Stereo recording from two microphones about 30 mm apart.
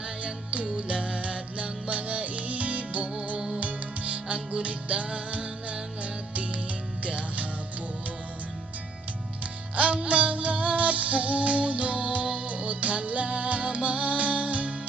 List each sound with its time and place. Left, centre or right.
0.5 s music: right
3.3 s music: right
3.6 s music: right
9.7 s music: right
12.5 s music: right